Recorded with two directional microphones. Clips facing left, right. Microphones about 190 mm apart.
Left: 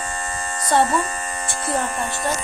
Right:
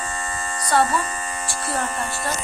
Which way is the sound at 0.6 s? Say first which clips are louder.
Left 2 dB; 25° left (ahead or behind).